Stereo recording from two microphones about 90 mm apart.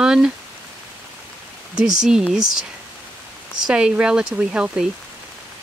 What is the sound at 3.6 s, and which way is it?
Speech, 10° right (ahead or behind).